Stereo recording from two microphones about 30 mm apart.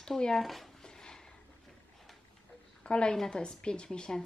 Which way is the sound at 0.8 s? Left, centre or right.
Left.